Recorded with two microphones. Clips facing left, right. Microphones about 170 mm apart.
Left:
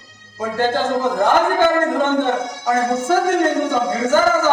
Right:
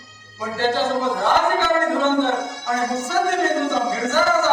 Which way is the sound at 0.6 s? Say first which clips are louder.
Left 2 dB; 50° left (ahead or behind).